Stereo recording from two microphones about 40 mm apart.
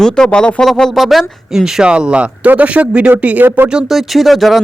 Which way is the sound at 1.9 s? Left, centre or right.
Right.